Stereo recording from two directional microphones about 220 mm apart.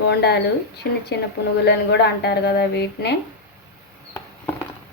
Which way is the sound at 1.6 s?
50° left (ahead or behind).